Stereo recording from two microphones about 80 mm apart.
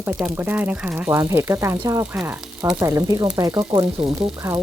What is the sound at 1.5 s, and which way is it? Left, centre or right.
Speech, right.